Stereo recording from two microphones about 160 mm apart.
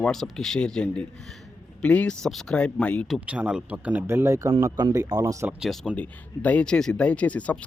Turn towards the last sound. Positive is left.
turn(degrees=10)  # may be behind; listen again after turning